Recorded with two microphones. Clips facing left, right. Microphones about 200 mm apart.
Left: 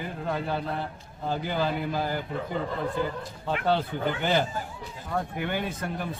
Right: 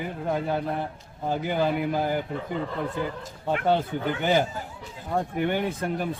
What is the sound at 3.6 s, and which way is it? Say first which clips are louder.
Speech: right 1 dB; 15° right (ahead or behind).